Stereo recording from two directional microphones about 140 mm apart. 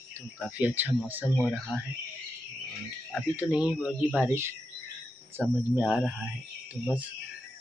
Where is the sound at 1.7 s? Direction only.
10° right (ahead or behind).